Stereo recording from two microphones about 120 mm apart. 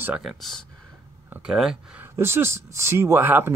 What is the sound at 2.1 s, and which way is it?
Speech, 20° right (ahead or behind).